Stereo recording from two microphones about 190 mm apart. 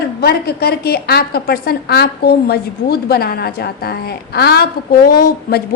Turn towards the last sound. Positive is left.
turn(degrees=55)  # may be behind; listen again after turning